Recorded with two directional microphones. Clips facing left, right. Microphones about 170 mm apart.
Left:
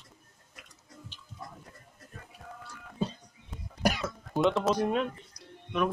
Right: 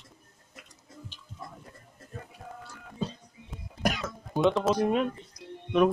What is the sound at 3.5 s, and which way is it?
Cough, centre (ahead or behind).